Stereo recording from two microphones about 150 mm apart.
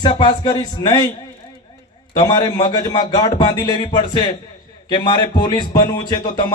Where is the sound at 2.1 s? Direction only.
30° left (ahead or behind).